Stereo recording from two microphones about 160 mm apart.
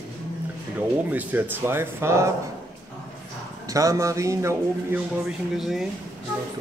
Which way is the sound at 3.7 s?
20° right (ahead or behind).